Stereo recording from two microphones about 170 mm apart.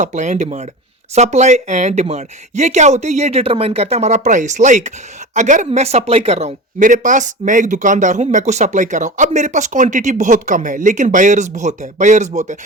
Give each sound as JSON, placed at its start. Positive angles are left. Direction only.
{"t": 0.0, "sound": "speech", "side_deg": -45}